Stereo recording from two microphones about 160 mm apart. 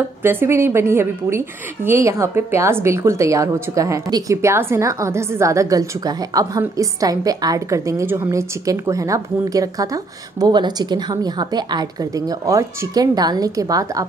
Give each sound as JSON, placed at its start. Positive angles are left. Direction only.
{"t": 0.2, "sound": "a woman's voice", "side_deg": -15}